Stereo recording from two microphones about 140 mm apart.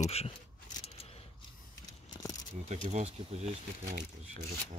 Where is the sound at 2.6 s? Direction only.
50° right (ahead or behind).